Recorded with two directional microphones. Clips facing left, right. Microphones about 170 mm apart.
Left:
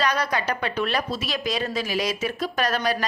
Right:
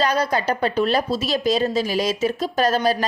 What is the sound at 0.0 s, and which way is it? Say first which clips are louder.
Speech: right 4 dB; 30° right (ahead or behind).